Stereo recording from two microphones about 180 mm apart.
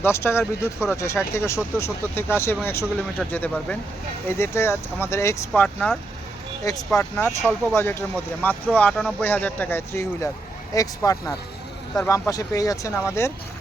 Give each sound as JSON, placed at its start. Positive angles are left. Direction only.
{"t": 0.0, "sound": "speech", "side_deg": 15}
{"t": 5.6, "sound": "speech", "side_deg": 0}
{"t": 6.7, "sound": "speech", "side_deg": 20}